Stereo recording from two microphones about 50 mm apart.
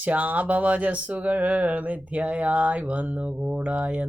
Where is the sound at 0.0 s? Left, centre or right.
Right.